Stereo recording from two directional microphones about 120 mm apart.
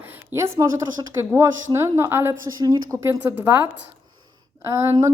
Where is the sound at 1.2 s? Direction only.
20° right (ahead or behind).